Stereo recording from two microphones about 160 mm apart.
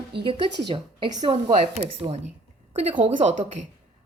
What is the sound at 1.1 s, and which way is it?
A woman's voice, 40° right (ahead or behind).